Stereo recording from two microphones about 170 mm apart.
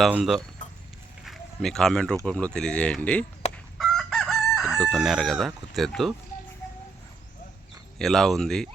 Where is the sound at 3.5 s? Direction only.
5° left (ahead or behind).